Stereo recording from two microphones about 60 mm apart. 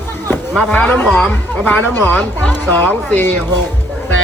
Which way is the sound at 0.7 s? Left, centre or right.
Left.